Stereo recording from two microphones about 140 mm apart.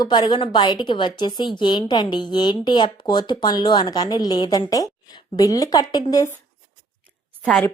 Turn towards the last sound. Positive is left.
turn(degrees=5)  # may be behind; listen again after turning